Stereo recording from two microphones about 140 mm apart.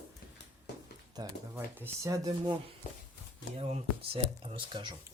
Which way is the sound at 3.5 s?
45° right (ahead or behind).